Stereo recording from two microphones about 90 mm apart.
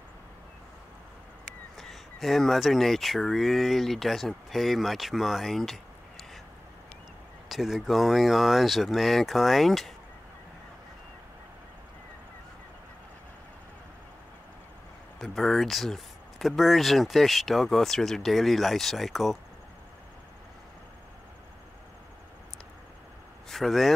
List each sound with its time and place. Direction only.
1.8 s speech: centre (ahead or behind)
7.4 s speech: 5° right (ahead or behind)
15.1 s speech: centre (ahead or behind)
23.5 s speech: centre (ahead or behind)